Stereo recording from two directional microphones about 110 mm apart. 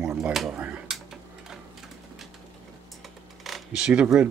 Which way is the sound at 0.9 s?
5° right (ahead or behind).